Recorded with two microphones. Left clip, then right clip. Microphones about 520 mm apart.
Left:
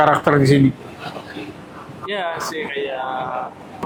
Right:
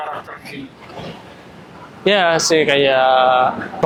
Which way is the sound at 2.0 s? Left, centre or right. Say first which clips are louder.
Right 10 dB; right.